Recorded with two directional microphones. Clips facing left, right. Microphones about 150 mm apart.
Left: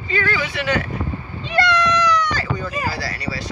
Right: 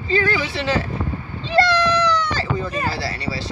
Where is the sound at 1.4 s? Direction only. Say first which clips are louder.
Right 2 dB; 30° right (ahead or behind).